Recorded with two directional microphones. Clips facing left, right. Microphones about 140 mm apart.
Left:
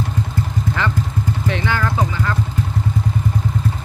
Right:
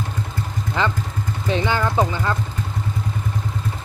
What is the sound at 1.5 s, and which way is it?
Speech, 20° right (ahead or behind).